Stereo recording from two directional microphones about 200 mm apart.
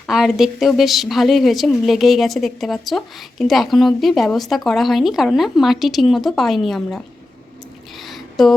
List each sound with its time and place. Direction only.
0.1 s a woman's voice: centre (ahead or behind)
8.4 s a woman's voice: centre (ahead or behind)